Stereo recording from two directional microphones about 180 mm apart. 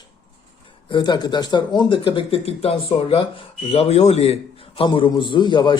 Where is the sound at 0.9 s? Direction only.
25° left (ahead or behind).